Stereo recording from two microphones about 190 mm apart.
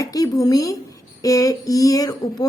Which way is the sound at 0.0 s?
20° left (ahead or behind).